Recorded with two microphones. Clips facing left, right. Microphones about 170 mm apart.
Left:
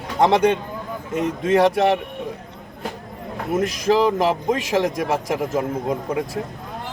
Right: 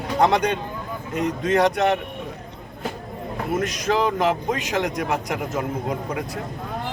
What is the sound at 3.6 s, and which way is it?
A man's voice, 30° left (ahead or behind).